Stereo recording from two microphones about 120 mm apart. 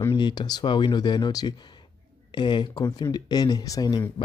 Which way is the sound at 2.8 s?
30° left (ahead or behind).